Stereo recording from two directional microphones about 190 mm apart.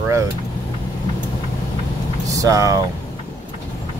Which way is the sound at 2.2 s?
15° right (ahead or behind).